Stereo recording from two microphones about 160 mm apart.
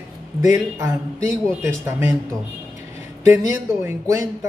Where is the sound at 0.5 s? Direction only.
15° right (ahead or behind).